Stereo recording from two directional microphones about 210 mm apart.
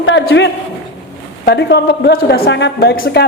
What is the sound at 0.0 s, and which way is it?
Speech, 65° left (ahead or behind).